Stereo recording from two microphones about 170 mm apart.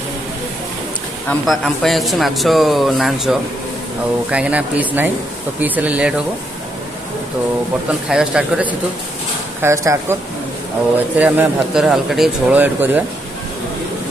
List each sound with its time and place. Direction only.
1.4 s a man's voice: centre (ahead or behind)
8.1 s a man's voice: 5° right (ahead or behind)
11.1 s speech: 10° right (ahead or behind)